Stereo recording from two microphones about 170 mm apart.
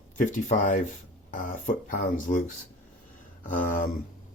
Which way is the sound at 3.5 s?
50° left (ahead or behind).